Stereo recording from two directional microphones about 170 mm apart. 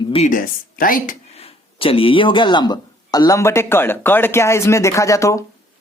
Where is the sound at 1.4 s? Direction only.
35° left (ahead or behind).